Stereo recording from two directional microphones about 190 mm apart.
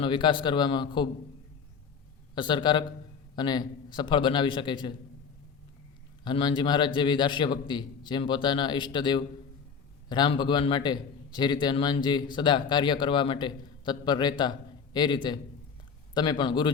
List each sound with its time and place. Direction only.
0.0 s a man's voice: 25° left (ahead or behind)
2.3 s a man's voice: 25° left (ahead or behind)
6.2 s a man's voice: 25° left (ahead or behind)